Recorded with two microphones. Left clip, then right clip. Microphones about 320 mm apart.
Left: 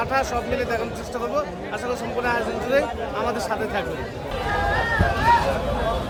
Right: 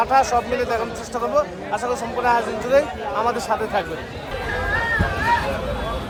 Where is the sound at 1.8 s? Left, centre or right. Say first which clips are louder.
Right 4 dB; centre.